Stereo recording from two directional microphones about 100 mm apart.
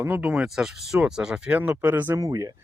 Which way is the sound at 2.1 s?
35° right (ahead or behind).